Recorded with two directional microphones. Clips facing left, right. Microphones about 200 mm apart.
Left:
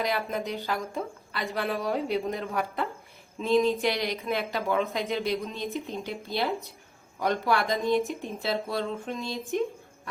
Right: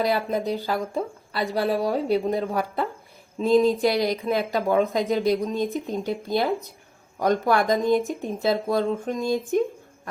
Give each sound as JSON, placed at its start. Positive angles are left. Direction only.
{"t": 0.0, "sound": "speech", "side_deg": -35}